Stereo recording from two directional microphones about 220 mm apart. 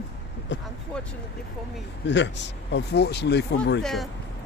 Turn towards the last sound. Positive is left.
turn(degrees=0)  # may be behind; listen again after turning